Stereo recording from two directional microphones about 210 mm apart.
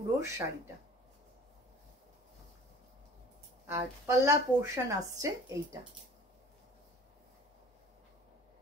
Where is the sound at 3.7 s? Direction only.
15° right (ahead or behind).